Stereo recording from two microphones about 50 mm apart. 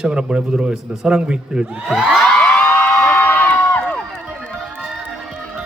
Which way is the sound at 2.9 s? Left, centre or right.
Left.